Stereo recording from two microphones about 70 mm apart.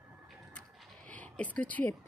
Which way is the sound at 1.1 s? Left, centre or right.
Left.